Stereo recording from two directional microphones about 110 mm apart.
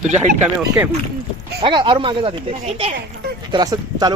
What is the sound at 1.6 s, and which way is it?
Speech, 45° right (ahead or behind).